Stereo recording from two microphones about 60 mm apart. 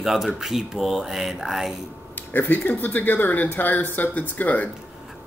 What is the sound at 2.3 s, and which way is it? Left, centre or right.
Speech, left.